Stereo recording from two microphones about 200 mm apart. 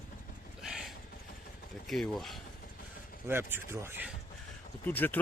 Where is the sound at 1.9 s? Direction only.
Centre (ahead or behind).